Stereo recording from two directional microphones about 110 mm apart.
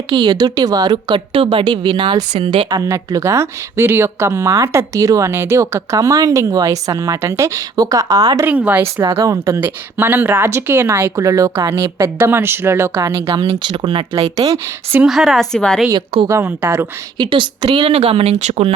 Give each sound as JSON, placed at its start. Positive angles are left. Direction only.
{"t": 0.2, "sound": "speech", "side_deg": -40}
{"t": 1.3, "sound": "a woman's voice", "side_deg": -55}
{"t": 1.6, "sound": "speech", "side_deg": -40}
{"t": 2.6, "sound": "speech", "side_deg": -30}
{"t": 8.4, "sound": "speech", "side_deg": -15}
{"t": 9.1, "sound": "speech", "side_deg": -30}
{"t": 9.6, "sound": "speech", "side_deg": -20}
{"t": 13.5, "sound": "speech", "side_deg": -50}
{"t": 14.3, "sound": "speech", "side_deg": -70}
{"t": 15.0, "sound": "speech", "side_deg": 0}
{"t": 16.2, "sound": "speech", "side_deg": -25}
{"t": 17.2, "sound": "speech", "side_deg": -45}
{"t": 17.9, "sound": "speech", "side_deg": -60}